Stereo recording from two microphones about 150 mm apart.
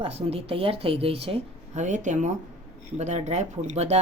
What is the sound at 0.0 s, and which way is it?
Speech, 40° right (ahead or behind).